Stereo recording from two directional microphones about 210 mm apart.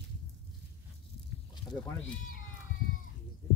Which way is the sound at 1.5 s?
20° left (ahead or behind).